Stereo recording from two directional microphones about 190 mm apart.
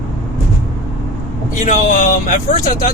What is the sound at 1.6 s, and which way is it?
Speech, 45° left (ahead or behind).